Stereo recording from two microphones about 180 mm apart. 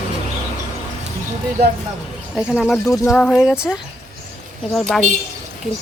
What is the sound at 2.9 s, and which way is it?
Cricket, 15° left (ahead or behind).